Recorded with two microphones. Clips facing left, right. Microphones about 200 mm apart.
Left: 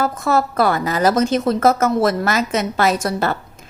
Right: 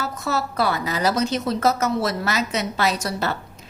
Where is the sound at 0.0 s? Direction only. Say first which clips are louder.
Left 7 dB; 50° left (ahead or behind).